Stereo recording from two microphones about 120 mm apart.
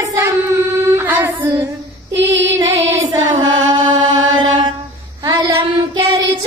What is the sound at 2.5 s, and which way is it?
Music, 25° right (ahead or behind).